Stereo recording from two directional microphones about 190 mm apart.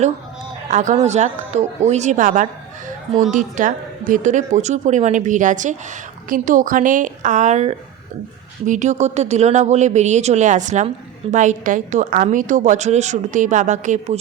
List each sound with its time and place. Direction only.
0.7 s a woman's voice: 40° right (ahead or behind)